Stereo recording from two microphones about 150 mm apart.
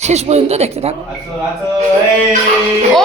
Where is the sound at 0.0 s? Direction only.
45° right (ahead or behind).